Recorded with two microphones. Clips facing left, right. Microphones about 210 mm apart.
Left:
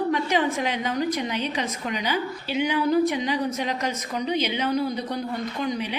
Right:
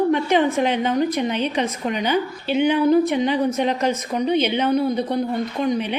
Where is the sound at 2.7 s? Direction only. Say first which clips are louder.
Right 4 dB; 25° right (ahead or behind).